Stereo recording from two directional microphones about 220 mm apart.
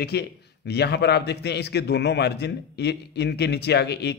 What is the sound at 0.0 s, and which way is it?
A man's voice, 50° left (ahead or behind).